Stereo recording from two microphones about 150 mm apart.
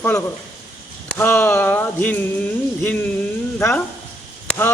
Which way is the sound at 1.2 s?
15° left (ahead or behind).